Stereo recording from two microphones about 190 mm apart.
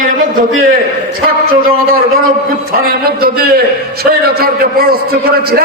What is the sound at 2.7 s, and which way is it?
A man's voice, 50° right (ahead or behind).